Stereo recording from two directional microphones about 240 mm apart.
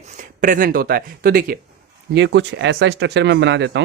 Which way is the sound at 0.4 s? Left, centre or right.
Right.